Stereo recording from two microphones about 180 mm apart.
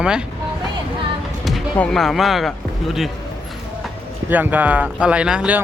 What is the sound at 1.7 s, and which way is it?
Speech, 5° left (ahead or behind).